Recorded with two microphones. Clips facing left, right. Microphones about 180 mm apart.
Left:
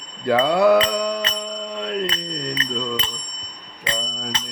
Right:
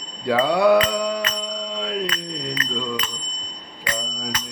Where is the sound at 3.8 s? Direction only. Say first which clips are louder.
Even; 25° left (ahead or behind).